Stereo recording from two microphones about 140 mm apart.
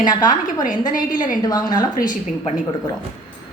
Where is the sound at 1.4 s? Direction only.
25° left (ahead or behind).